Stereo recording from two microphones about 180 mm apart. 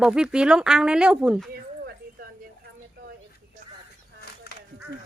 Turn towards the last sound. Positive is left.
turn(degrees=65)  # may be behind; listen again after turning